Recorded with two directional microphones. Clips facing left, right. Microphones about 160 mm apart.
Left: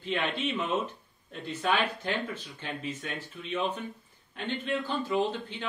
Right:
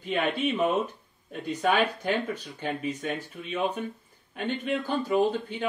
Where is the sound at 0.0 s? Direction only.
15° right (ahead or behind).